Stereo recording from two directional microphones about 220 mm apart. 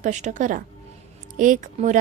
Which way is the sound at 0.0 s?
35° right (ahead or behind).